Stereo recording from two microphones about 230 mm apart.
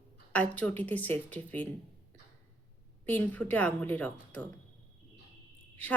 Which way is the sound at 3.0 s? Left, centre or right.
Centre.